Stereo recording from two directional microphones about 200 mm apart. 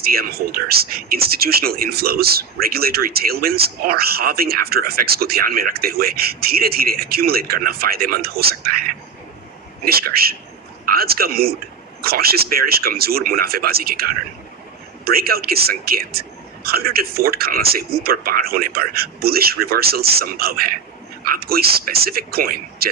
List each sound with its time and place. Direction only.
0.0 s speech: 50° right (ahead or behind)